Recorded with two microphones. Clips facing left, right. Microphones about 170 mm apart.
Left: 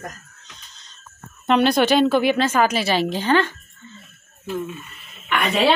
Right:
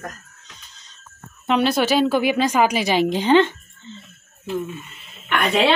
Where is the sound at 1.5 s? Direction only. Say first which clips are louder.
Left 2 dB; 5° right (ahead or behind); by 4.0 s 20° right (ahead or behind).